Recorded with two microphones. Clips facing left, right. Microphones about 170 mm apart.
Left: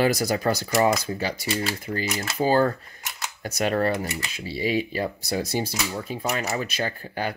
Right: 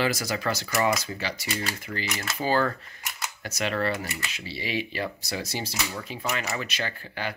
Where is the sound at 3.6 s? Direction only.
45° left (ahead or behind).